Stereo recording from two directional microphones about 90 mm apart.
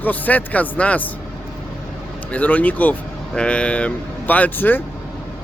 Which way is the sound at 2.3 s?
15° left (ahead or behind).